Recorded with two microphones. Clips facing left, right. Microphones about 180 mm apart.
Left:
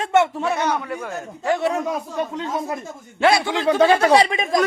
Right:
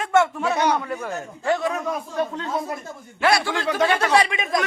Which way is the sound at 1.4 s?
25° left (ahead or behind).